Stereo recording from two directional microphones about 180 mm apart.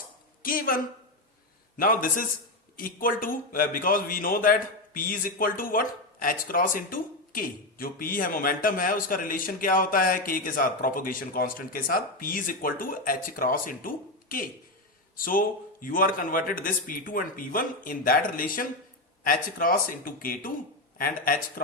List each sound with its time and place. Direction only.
0.4 s a man's voice: 50° left (ahead or behind)
1.8 s a man's voice: 50° left (ahead or behind)